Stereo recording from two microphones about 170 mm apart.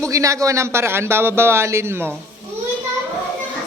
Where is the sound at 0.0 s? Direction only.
20° right (ahead or behind).